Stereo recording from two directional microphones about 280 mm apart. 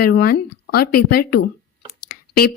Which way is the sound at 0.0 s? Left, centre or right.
Left.